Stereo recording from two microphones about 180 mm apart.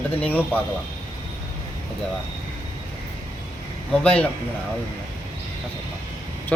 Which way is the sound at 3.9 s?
5° left (ahead or behind).